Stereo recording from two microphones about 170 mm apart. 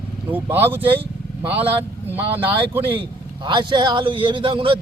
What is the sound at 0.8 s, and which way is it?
Vehicle, 30° right (ahead or behind).